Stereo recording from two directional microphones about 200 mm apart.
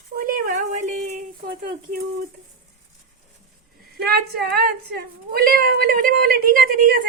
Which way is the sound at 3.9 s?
50° right (ahead or behind).